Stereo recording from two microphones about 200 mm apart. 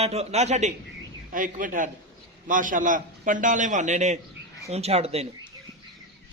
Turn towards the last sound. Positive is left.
turn(degrees=-30)  # may be behind; listen again after turning